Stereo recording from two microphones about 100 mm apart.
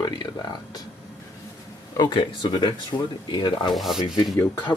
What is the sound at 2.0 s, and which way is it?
Speech, 55° left (ahead or behind).